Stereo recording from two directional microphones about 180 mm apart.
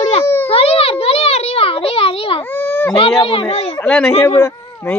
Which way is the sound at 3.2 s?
35° left (ahead or behind).